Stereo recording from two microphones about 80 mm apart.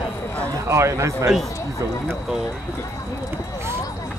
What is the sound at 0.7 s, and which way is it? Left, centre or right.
Speech, right.